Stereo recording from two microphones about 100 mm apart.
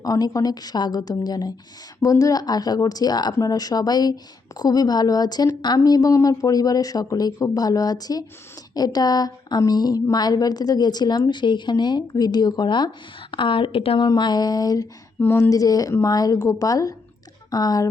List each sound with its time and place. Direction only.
0.0 s a woman's voice: 35° left (ahead or behind); by 14.1 s 65° left (ahead or behind)
14.1 s a woman's voice: 45° left (ahead or behind)
15.2 s a woman's voice: 30° left (ahead or behind)